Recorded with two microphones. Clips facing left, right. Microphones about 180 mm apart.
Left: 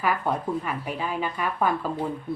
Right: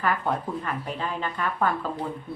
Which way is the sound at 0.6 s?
10° left (ahead or behind).